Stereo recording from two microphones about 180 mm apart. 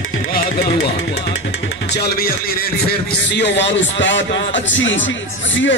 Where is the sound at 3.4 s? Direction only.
85° left.